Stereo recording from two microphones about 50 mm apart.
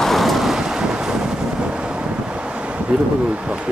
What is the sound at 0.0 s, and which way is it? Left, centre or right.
Vehicle, centre.